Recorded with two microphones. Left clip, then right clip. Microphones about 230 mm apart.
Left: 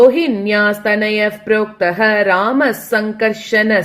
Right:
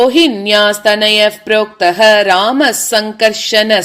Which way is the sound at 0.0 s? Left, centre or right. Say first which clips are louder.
Right 1 dB; right.